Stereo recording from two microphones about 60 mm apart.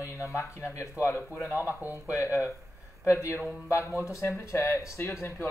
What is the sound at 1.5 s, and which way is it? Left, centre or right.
Speech, right.